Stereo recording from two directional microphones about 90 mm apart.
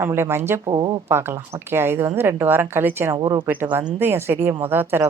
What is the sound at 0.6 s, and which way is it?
Speech, 60° right (ahead or behind).